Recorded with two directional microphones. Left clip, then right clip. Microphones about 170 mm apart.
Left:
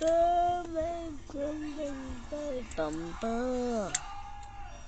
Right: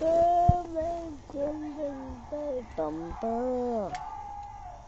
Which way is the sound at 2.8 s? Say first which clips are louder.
Right 1 dB; 25° left (ahead or behind).